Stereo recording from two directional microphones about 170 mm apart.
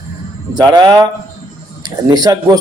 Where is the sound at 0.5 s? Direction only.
25° right (ahead or behind).